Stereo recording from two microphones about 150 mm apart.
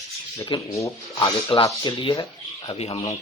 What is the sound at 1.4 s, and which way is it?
Speech, 35° left (ahead or behind).